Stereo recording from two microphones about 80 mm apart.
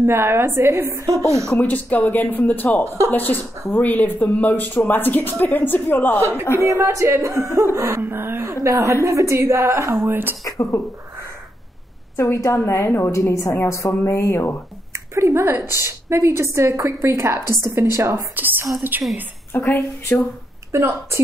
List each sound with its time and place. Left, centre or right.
0.0 s a woman's voice: right
1.6 s speech: left
2.8 s a woman's voice: right
3.1 s speech: left
6.6 s a woman's voice: right
8.0 s a woman's voice: right
10.0 s speech: right
10.4 s speech: left
12.2 s a woman's voice: left
14.9 s a woman's voice: right
18.3 s speech: right
19.5 s speech: left
20.7 s a woman's voice: right